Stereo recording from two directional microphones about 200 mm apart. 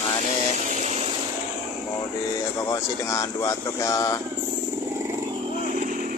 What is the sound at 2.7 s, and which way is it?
Speech, 15° left (ahead or behind).